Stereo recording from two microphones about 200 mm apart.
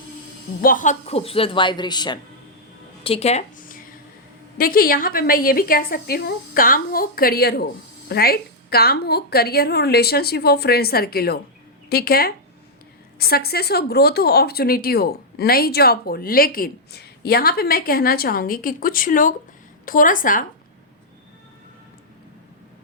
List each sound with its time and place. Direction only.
0.6 s speech: 40° left (ahead or behind); by 2.1 s 20° left (ahead or behind)
3.0 s a sound: 30° left (ahead or behind)
4.5 s a woman's voice: 45° left (ahead or behind)